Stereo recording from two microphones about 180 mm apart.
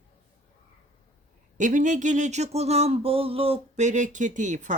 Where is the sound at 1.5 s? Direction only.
45° right (ahead or behind).